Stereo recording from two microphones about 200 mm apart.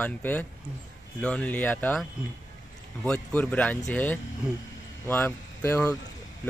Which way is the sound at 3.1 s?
5° left (ahead or behind).